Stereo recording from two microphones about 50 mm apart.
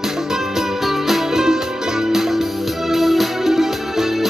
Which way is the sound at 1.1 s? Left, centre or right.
Centre.